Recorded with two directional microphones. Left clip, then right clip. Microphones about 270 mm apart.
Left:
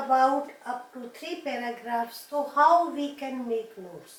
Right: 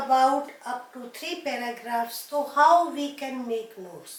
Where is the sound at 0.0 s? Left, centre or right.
Centre.